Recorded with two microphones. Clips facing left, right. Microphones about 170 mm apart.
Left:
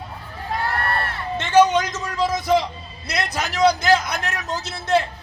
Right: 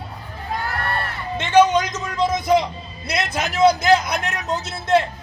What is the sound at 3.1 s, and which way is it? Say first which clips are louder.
A man's voice: right 2 dB; 20° right (ahead or behind).